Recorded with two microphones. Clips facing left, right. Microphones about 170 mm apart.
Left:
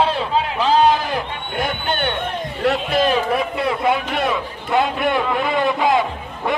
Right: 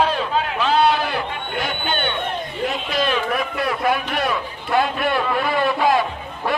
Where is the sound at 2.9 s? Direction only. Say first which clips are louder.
Left 3 dB; 40° left (ahead or behind).